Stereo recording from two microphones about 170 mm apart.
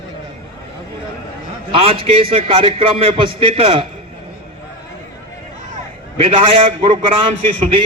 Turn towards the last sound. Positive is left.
turn(degrees=-30)  # may be behind; listen again after turning